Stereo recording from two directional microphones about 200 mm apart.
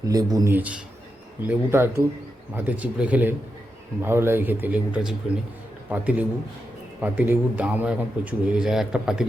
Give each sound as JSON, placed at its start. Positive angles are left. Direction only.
{"t": 0.0, "sound": "a man's voice", "side_deg": -20}